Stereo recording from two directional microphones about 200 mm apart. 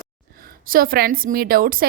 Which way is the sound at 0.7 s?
45° right (ahead or behind).